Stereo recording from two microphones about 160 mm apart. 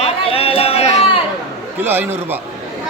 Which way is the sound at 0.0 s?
40° left (ahead or behind).